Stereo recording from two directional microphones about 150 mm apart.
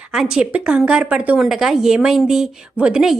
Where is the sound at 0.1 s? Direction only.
5° right (ahead or behind).